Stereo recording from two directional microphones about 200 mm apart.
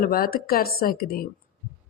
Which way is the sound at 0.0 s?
45° left (ahead or behind).